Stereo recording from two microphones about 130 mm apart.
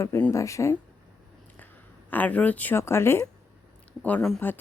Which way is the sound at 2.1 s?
10° left (ahead or behind).